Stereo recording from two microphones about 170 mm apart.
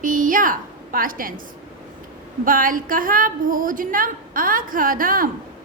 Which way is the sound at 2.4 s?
55° right (ahead or behind).